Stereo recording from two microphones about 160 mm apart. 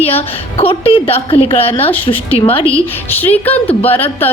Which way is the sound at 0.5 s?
35° left (ahead or behind).